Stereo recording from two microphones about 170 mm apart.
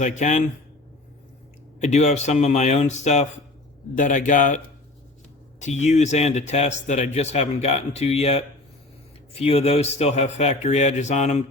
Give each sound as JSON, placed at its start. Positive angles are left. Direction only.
{"t": 0.0, "sound": "a man's voice", "side_deg": 45}
{"t": 1.8, "sound": "a man's voice", "side_deg": 40}